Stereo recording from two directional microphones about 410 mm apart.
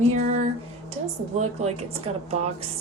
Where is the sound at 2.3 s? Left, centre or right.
Centre.